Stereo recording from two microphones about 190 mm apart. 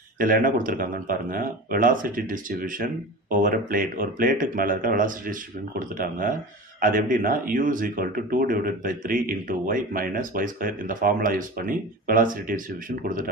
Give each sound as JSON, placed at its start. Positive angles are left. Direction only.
{"t": 0.2, "sound": "speech", "side_deg": -45}